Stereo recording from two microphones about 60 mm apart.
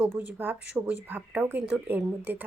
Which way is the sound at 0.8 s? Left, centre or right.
Right.